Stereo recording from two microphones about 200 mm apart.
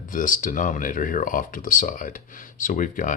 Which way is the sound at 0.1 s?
40° left (ahead or behind).